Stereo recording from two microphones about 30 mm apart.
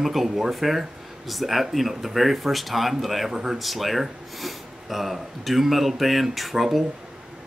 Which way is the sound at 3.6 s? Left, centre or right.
Centre.